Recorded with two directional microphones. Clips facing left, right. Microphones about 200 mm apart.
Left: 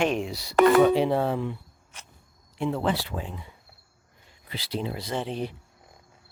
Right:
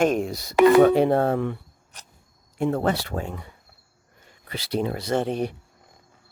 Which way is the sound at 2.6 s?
45° right (ahead or behind).